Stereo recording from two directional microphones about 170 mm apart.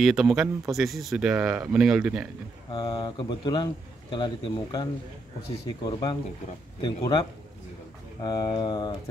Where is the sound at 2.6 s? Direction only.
30° left (ahead or behind).